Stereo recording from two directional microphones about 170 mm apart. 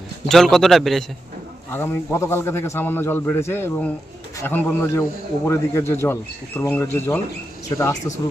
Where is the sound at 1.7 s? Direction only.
15° left (ahead or behind).